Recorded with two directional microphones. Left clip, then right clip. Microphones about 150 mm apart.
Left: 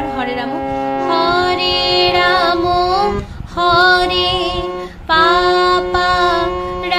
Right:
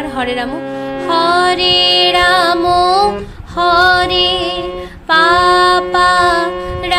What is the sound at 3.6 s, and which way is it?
Music, 20° right (ahead or behind).